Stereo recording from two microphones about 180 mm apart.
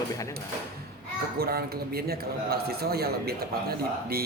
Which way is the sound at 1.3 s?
60° right (ahead or behind).